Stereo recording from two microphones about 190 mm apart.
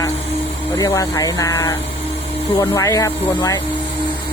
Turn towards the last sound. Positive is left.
turn(degrees=15)  # may be behind; listen again after turning